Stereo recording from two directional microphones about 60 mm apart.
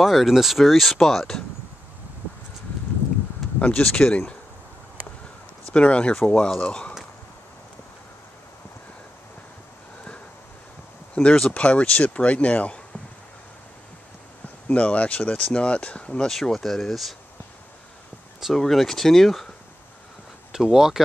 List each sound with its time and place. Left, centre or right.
0.0 s speech: centre
3.5 s speech: left
5.7 s speech: centre
11.2 s speech: centre
14.7 s speech: left
16.3 s speech: centre
18.5 s speech: centre
20.5 s speech: centre